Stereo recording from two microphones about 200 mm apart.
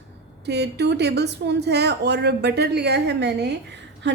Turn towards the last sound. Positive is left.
turn(degrees=-60)  # may be behind; listen again after turning